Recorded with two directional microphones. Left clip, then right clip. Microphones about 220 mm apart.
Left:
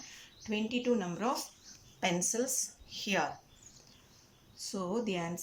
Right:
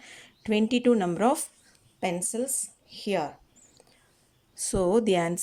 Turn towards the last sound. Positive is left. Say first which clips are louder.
# right 12 dB
turn(degrees=-40)  # may be behind; listen again after turning